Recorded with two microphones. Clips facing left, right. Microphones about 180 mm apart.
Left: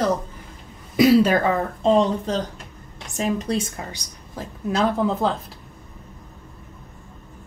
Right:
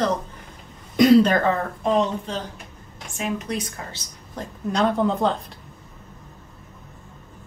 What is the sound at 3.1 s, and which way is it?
Speech, 35° left (ahead or behind).